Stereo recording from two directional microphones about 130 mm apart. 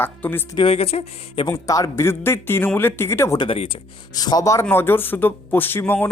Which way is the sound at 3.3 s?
45° left (ahead or behind).